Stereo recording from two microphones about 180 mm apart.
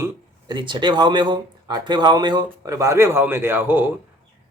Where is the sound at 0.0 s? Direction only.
25° right (ahead or behind).